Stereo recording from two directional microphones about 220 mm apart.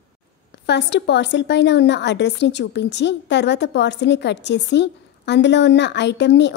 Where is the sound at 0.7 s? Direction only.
50° left (ahead or behind).